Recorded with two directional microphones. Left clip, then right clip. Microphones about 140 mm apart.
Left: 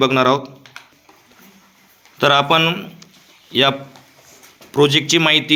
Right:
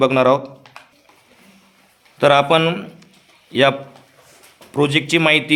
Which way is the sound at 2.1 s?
20° right (ahead or behind).